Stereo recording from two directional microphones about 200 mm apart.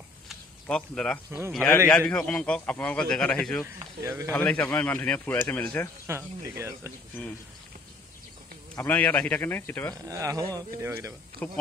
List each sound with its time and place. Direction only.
0.3 s a sound: 5° left (ahead or behind)
1.5 s a man's voice: 10° left (ahead or behind)
4.0 s speech: 15° right (ahead or behind)
4.3 s speech: 5° left (ahead or behind)
6.0 s speech: 15° right (ahead or behind)
8.7 s speech: 10° left (ahead or behind)
10.0 s speech: 15° right (ahead or behind)
11.4 s speech: 5° left (ahead or behind)